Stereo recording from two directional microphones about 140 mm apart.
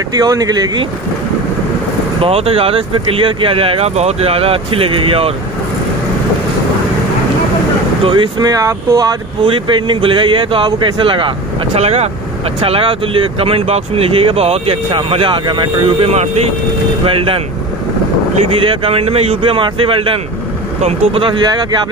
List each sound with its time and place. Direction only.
0.1 s speech: 25° right (ahead or behind)
2.2 s speech: 45° right (ahead or behind)
8.0 s speech: 35° right (ahead or behind)
9.4 s speech: 35° right (ahead or behind)
11.8 s speech: 50° right (ahead or behind)
18.8 s speech: 45° right (ahead or behind)